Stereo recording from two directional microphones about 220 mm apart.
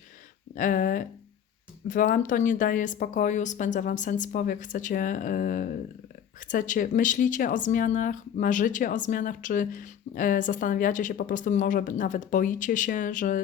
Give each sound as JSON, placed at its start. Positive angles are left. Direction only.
{"t": 0.5, "sound": "speech", "side_deg": 40}